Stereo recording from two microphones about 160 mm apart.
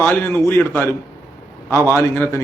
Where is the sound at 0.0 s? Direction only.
10° left (ahead or behind).